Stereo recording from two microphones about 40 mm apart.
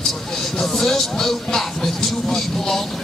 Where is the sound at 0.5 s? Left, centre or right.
Centre.